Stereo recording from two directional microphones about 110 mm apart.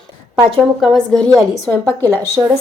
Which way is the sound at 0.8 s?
5° left (ahead or behind).